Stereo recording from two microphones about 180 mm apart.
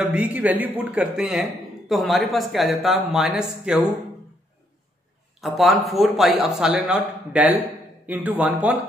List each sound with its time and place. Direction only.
0.0 s speech: 5° right (ahead or behind)
5.4 s speech: centre (ahead or behind)